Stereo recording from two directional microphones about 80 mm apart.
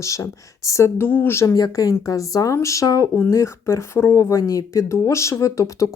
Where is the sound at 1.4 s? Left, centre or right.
Left.